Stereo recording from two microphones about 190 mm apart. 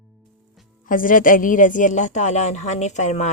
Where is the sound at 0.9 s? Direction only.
45° left (ahead or behind).